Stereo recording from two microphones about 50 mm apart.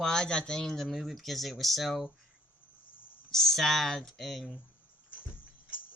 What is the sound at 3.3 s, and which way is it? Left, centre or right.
Speech, centre.